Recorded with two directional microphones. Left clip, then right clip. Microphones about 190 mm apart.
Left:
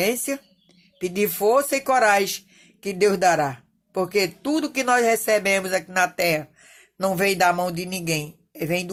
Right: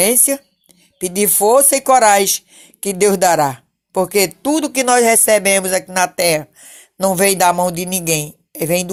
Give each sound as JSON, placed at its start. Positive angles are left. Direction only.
{"t": 0.0, "sound": "speech", "side_deg": -20}